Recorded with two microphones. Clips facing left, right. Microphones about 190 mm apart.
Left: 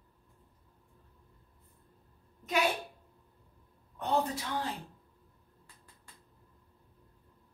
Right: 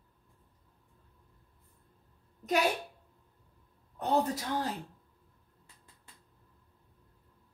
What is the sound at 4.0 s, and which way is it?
Speech, 40° right (ahead or behind).